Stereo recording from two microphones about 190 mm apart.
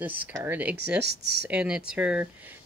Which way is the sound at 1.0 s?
60° right (ahead or behind).